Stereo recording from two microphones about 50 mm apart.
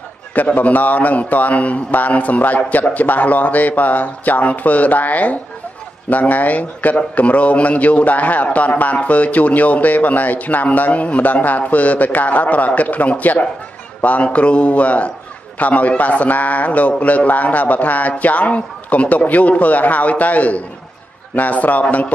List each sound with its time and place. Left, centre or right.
0.3 s a man's voice: left